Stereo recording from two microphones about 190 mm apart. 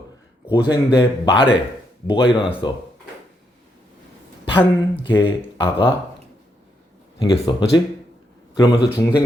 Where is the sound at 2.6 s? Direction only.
25° left (ahead or behind).